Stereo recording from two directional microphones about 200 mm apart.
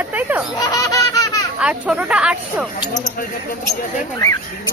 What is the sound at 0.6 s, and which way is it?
Baby laughter, 15° left (ahead or behind).